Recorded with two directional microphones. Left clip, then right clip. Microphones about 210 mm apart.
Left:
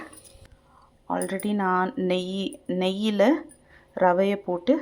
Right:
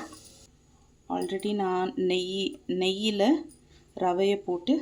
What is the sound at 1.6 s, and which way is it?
Speech, 5° left (ahead or behind).